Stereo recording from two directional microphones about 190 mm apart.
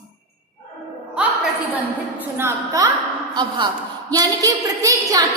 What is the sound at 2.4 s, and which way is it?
Speech, 15° right (ahead or behind).